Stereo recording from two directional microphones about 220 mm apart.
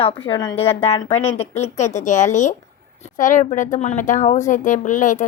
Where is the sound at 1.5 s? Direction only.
30° left (ahead or behind).